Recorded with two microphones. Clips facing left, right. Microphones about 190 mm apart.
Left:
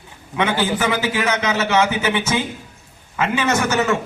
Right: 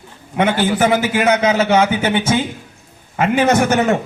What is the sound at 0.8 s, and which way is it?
A man's voice, 50° right (ahead or behind).